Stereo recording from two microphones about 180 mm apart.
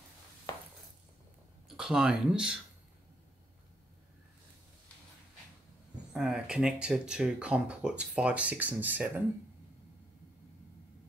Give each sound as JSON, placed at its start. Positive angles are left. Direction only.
{"t": 0.5, "sound": "a sound", "side_deg": 20}
{"t": 1.8, "sound": "speech", "side_deg": -5}
{"t": 6.1, "sound": "speech", "side_deg": -5}